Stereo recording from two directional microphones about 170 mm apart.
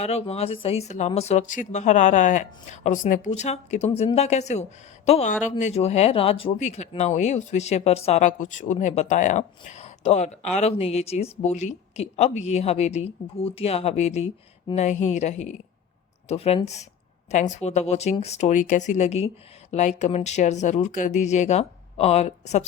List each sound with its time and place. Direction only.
0.0 s speech: 40° left (ahead or behind)